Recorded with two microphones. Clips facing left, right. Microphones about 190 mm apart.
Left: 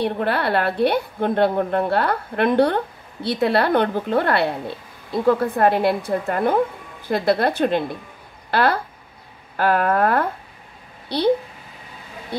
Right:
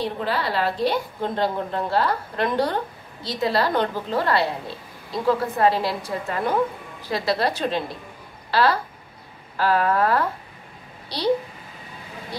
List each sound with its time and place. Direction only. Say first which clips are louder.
0.0 s a woman's voice: left 4 dB; 60° left (ahead or behind)